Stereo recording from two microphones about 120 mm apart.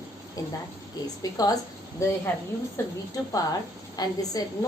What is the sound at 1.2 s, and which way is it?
Speech, 30° left (ahead or behind).